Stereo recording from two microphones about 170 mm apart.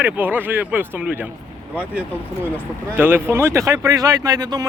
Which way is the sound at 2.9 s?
15° right (ahead or behind).